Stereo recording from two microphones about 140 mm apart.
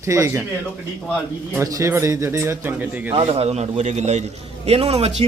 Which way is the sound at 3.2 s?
40° right (ahead or behind).